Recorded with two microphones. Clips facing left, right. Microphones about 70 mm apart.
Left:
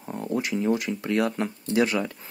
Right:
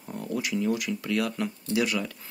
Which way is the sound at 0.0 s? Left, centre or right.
Left.